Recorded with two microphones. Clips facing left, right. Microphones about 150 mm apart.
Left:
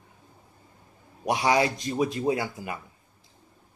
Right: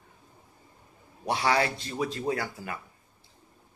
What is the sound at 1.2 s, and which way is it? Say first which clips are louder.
Speech: left 3 dB; 15° left (ahead or behind).